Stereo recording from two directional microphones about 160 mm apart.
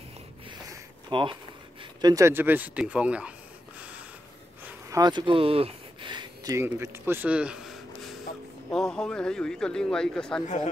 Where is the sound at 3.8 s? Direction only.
10° right (ahead or behind).